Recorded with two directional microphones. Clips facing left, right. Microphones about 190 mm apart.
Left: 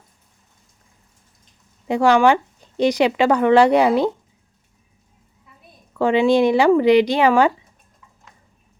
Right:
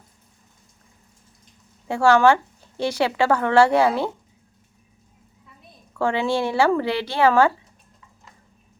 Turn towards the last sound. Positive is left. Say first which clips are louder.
# left 2 dB
turn(degrees=15)  # may be behind; listen again after turning